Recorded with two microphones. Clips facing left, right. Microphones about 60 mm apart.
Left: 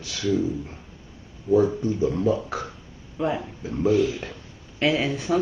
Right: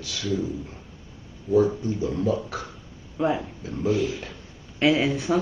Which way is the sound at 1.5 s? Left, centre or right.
Left.